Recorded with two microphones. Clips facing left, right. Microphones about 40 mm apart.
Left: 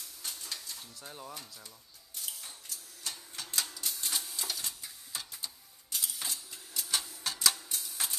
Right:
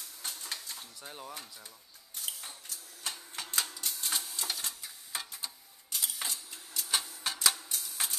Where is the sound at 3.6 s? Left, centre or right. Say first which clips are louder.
Right 1 dB; centre.